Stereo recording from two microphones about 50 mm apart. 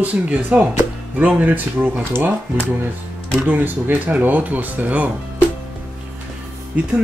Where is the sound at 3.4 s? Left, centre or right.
Right.